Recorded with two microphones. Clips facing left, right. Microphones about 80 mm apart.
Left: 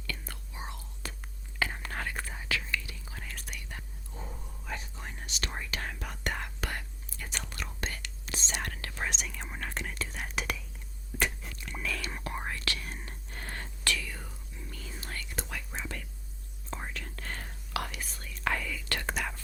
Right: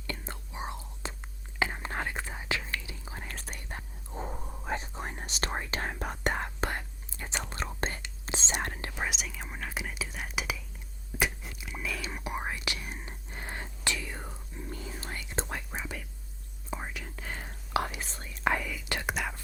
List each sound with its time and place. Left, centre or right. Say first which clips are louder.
0.1 s whispering: right 3 dB; right
9.0 s whispering: even; centre; by 15.6 s right
15.7 s whispering: right 1 dB; centre
17.7 s whispering: right 5 dB; right; by 19.4 s centre